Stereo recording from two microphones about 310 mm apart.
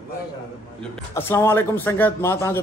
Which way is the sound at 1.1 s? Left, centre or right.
Centre.